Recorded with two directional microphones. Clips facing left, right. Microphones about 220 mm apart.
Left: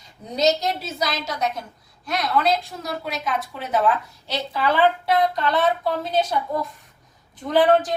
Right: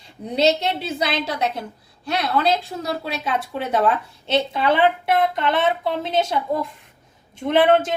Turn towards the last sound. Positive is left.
turn(degrees=-25)  # may be behind; listen again after turning